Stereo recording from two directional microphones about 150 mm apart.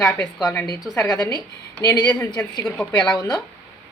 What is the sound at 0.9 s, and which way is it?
A woman's voice, 25° left (ahead or behind).